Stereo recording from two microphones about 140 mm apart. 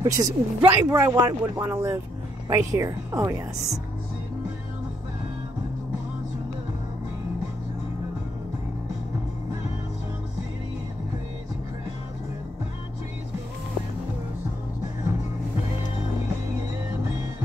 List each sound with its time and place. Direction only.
0.0 s speech: 25° right (ahead or behind)